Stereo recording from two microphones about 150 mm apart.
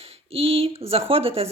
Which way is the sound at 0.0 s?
40° right (ahead or behind).